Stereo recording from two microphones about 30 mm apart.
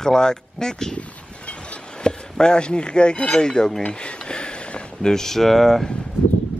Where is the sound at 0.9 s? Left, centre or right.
Left.